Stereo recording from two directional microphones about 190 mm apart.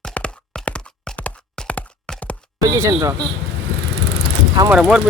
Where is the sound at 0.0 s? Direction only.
5° left (ahead or behind).